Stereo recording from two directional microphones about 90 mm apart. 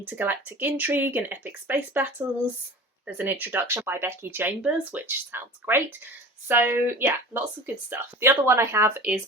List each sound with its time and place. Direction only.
0.1 s speech: 20° right (ahead or behind)